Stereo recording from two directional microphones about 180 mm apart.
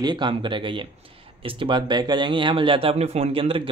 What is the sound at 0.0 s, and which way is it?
Speech, 25° right (ahead or behind).